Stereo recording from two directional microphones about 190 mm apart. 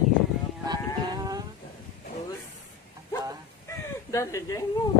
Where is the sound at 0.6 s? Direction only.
20° right (ahead or behind).